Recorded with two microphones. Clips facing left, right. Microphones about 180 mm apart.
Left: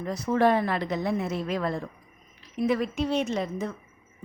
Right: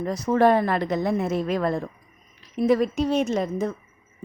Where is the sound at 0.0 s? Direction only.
40° right (ahead or behind).